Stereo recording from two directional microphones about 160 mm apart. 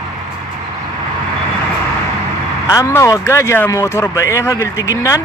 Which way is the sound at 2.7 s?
20° left (ahead or behind).